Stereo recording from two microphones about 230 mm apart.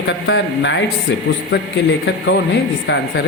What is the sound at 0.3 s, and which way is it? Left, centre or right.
Speech, left.